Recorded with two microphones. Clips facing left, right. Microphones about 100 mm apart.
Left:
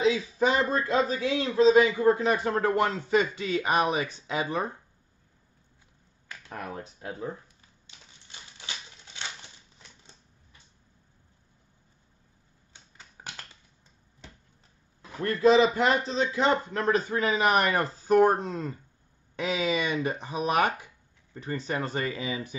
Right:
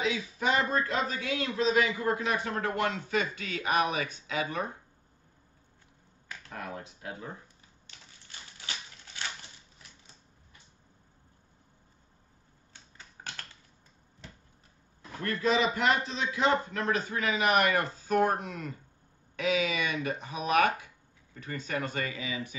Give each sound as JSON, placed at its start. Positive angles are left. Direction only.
{"t": 0.0, "sound": "a man's voice", "side_deg": 35}
{"t": 6.5, "sound": "a man's voice", "side_deg": 35}
{"t": 8.3, "sound": "typewriter", "side_deg": 20}
{"t": 12.7, "sound": "a sound", "side_deg": 15}
{"t": 15.0, "sound": "a man's voice", "side_deg": 30}